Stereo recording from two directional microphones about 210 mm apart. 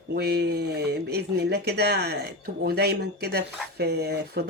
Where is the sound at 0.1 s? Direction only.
50° right (ahead or behind).